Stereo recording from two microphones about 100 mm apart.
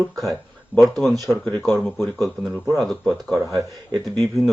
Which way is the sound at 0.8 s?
Centre (ahead or behind).